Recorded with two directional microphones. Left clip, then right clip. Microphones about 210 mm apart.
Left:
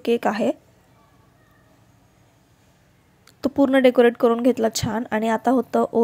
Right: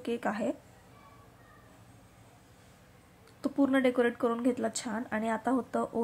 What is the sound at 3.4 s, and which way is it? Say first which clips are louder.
A woman's voice: left 11 dB; 35° left (ahead or behind).